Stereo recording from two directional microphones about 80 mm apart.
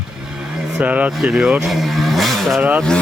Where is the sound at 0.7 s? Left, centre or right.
Centre.